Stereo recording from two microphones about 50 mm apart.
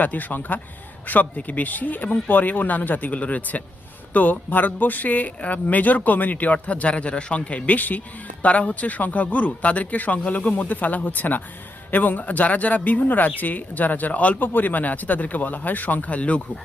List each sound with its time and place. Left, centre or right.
0.0 s speech: left